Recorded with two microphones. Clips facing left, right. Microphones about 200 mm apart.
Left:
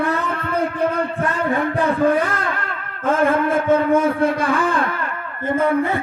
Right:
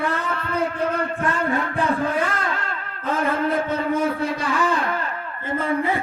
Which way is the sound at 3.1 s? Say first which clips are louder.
Left 5 dB; 50° left (ahead or behind).